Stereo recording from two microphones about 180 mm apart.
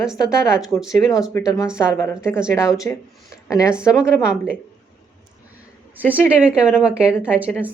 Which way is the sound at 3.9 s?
5° right (ahead or behind).